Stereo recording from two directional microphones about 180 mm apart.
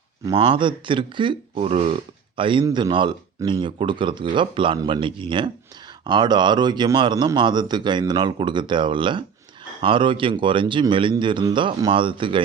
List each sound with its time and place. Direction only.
0.3 s a man's voice: 30° right (ahead or behind)